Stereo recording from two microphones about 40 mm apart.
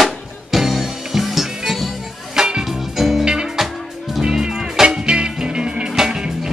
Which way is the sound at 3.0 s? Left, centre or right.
Centre.